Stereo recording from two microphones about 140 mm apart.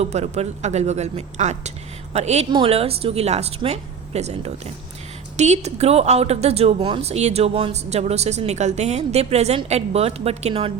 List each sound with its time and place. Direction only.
0.0 s a woman's voice: 50° right (ahead or behind)
2.5 s a woman's voice: 40° right (ahead or behind)